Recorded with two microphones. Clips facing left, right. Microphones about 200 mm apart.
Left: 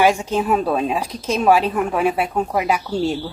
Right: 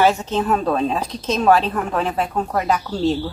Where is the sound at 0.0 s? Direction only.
10° left (ahead or behind).